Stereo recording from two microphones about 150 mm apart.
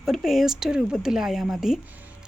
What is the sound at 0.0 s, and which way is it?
Speech, centre (ahead or behind).